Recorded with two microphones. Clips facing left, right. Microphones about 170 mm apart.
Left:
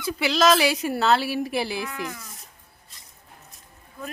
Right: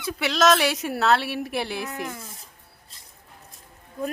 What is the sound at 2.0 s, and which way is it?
Speech, 30° right (ahead or behind).